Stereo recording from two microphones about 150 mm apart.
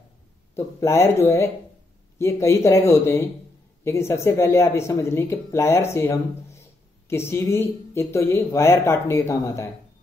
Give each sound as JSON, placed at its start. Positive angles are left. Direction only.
{"t": 0.6, "sound": "speech", "side_deg": 20}